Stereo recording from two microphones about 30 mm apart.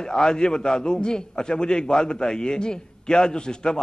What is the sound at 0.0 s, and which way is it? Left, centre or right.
A man's voice, left.